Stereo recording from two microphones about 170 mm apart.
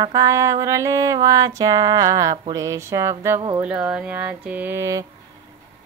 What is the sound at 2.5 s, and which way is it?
Speech, 20° right (ahead or behind).